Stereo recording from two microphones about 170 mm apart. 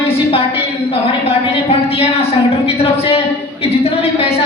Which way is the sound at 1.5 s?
35° left (ahead or behind).